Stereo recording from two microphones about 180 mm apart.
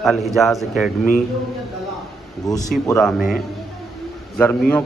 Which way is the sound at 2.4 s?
Centre (ahead or behind).